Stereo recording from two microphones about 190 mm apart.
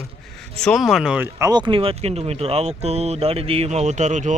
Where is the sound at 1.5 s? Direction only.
25° right (ahead or behind).